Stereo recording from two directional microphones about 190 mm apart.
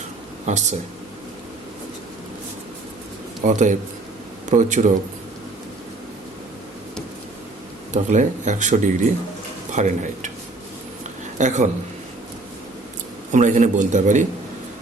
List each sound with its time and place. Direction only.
0.4 s speech: 35° right (ahead or behind)
3.4 s speech: 40° right (ahead or behind)
8.1 s speech: 40° right (ahead or behind)
11.3 s speech: 40° right (ahead or behind)
13.3 s speech: 40° right (ahead or behind)